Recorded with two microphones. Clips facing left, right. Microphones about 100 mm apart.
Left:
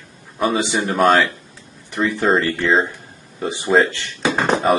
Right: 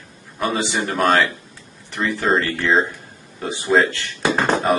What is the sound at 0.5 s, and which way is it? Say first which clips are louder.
Speech: left 2 dB; 15° left (ahead or behind).